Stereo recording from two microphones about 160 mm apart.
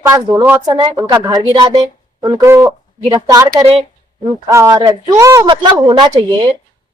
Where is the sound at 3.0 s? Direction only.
30° right (ahead or behind).